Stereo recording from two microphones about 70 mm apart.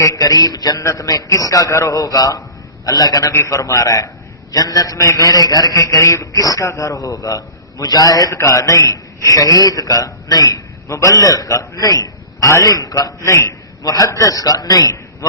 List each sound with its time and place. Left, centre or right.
0.0 s a man's voice: left
0.8 s a man's voice: left
8.4 s a man's voice: left
10.8 s a man's voice: left
13.8 s a man's voice: left